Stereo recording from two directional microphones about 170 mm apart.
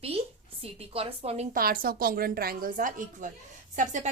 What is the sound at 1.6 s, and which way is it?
A woman's voice, 60° right (ahead or behind).